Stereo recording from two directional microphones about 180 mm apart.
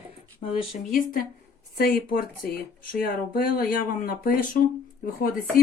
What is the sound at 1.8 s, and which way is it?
Speech, 55° left (ahead or behind).